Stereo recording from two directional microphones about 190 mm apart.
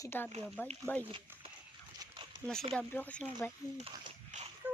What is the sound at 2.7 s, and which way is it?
Speech, 10° left (ahead or behind).